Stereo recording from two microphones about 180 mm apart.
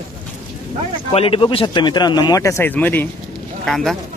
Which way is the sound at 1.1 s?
30° left (ahead or behind).